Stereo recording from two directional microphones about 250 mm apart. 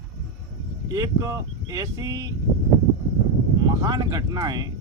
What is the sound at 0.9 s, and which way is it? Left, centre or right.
Speech, centre.